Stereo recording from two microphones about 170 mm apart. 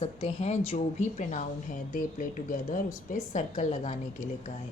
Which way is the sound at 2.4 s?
55° left (ahead or behind).